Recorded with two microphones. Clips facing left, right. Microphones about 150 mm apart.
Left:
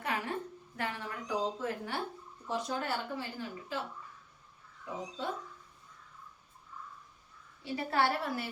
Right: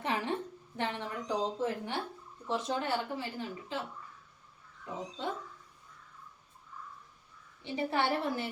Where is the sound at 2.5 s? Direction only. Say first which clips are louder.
Right 2 dB; 25° right (ahead or behind).